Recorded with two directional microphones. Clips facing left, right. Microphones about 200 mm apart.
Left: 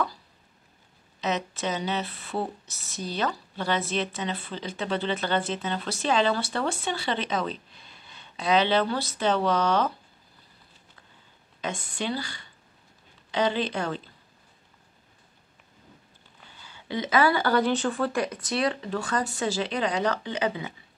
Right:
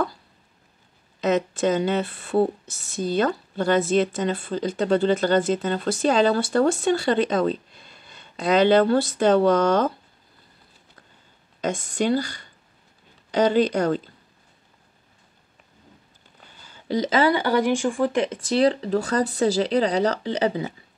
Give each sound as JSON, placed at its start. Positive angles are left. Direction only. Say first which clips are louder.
{"t": 1.2, "sound": "speech", "louder": "right 8 dB", "side_deg": -50}
{"t": 11.6, "sound": "speech", "louder": "right 8 dB", "side_deg": -45}
{"t": 16.6, "sound": "a sound", "louder": "right 7 dB", "side_deg": -40}
{"t": 17.1, "sound": "speech", "louder": "right 2 dB", "side_deg": -20}